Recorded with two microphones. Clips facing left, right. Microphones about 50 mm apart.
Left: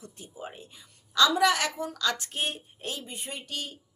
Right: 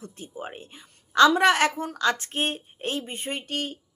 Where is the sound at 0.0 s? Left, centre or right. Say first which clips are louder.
Right 4 dB; right.